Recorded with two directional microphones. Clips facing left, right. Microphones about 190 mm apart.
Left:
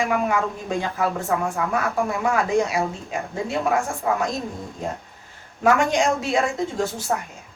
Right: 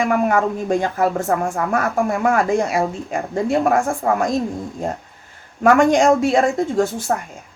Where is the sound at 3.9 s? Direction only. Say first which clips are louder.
Right 4 dB; 55° right (ahead or behind).